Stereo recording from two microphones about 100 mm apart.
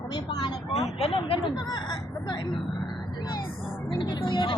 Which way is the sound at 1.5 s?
40° left (ahead or behind).